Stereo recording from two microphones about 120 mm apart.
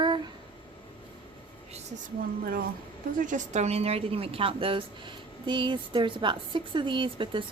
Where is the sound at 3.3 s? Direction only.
80° right.